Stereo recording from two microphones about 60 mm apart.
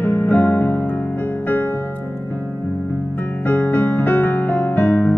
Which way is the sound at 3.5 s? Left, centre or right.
Left.